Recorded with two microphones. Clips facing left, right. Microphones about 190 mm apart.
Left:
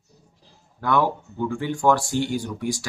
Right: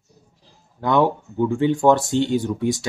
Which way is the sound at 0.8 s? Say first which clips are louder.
Right 4 dB; 20° right (ahead or behind).